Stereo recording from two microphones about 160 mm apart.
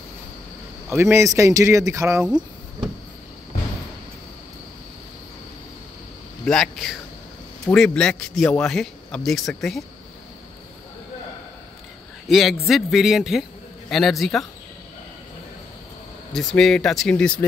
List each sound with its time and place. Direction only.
1.1 s speech: 20° right (ahead or behind)
2.2 s a sound: 5° right (ahead or behind)
6.4 s speech: 5° left (ahead or behind)
12.3 s a man's voice: centre (ahead or behind)
16.3 s speech: centre (ahead or behind)